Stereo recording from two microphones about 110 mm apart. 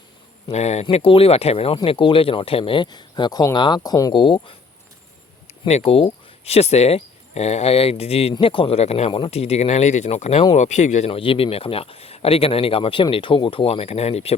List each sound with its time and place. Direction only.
0.5 s speech: 85° left; by 4.1 s 35° left (ahead or behind)
4.1 s speech: 50° left (ahead or behind)
5.6 s speech: 75° left (ahead or behind)